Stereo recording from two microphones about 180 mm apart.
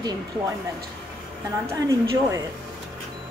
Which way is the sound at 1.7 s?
20° right (ahead or behind).